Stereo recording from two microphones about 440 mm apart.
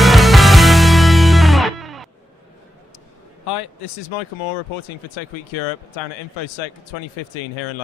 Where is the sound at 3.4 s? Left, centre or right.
Left.